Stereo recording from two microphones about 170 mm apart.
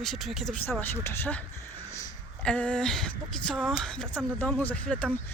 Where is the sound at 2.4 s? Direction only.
5° left (ahead or behind).